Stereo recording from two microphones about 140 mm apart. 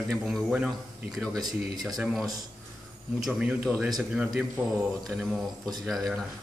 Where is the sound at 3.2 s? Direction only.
5° right (ahead or behind).